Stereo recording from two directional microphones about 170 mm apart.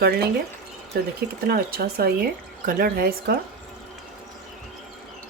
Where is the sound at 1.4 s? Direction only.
65° right (ahead or behind).